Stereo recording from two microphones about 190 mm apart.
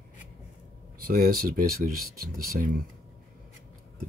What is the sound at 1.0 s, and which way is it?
Speech, 50° right (ahead or behind).